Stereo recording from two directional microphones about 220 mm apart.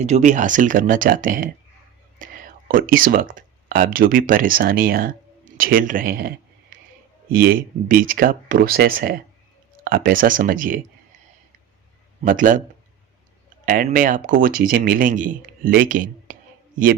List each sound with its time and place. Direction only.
0.0 s speech: 30° right (ahead or behind)
7.3 s speech: 40° right (ahead or behind)
12.2 s speech: 40° right (ahead or behind)
13.7 s speech: 40° right (ahead or behind)